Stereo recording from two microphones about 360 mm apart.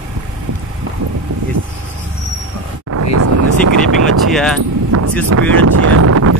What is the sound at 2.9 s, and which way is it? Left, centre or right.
Vehicle, right.